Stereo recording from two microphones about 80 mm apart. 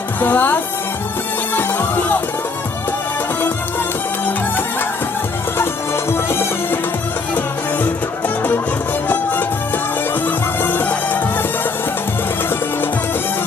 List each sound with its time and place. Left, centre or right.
0.2 s speech: left
1.5 s music: left
6.1 s music: left
9.0 s music: left